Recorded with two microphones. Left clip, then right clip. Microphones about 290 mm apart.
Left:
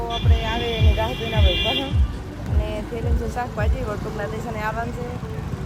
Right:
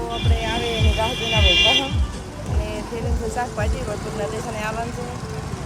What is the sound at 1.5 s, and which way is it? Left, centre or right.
Speech, centre.